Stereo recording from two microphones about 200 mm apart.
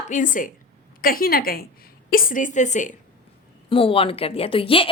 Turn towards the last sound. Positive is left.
turn(degrees=25)  # may be behind; listen again after turning